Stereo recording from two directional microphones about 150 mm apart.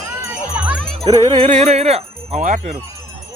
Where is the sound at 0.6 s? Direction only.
5° right (ahead or behind).